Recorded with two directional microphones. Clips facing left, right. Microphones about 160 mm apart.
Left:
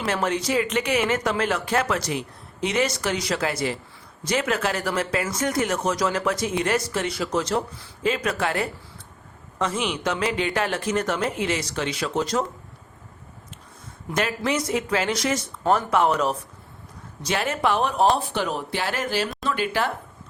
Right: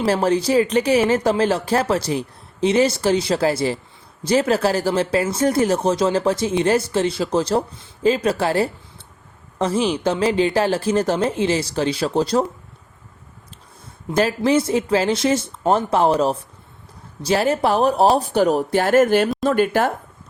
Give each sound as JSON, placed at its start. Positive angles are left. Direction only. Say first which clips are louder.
{"t": 0.0, "sound": "speech", "louder": "right 7 dB", "side_deg": -30}
{"t": 14.1, "sound": "speech", "louder": "right 7 dB", "side_deg": -30}